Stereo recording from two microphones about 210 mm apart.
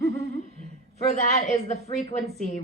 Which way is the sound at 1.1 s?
35° left (ahead or behind).